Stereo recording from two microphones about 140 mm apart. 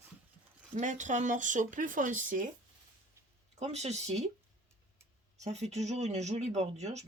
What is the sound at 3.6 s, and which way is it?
Speech, 50° right (ahead or behind).